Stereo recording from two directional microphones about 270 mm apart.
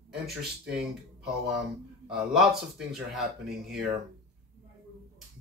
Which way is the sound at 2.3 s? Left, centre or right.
Centre.